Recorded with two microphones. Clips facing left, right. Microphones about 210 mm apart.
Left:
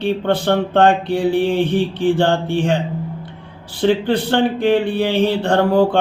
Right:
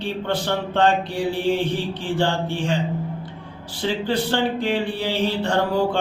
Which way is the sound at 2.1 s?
55° left (ahead or behind).